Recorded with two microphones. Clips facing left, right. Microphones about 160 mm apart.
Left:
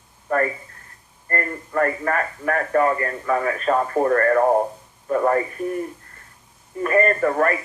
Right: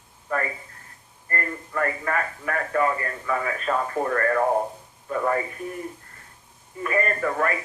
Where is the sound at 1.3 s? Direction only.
45° left (ahead or behind).